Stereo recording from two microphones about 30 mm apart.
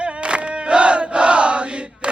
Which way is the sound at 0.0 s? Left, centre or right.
Right.